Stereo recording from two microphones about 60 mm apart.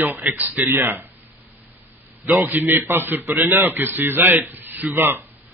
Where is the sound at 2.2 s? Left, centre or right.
Right.